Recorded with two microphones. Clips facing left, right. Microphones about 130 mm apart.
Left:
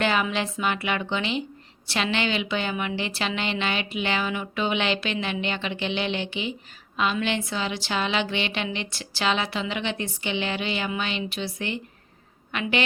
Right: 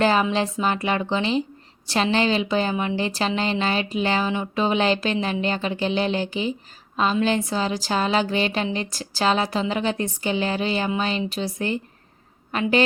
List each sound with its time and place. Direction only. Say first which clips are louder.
0.0 s a woman's voice: right 5 dB; 35° right (ahead or behind)